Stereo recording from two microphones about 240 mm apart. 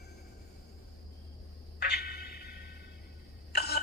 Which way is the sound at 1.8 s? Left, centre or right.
Left.